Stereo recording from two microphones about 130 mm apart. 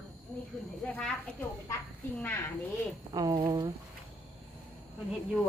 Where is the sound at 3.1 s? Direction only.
30° right (ahead or behind).